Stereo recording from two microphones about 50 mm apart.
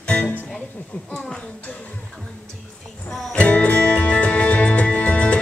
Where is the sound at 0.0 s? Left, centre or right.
Left.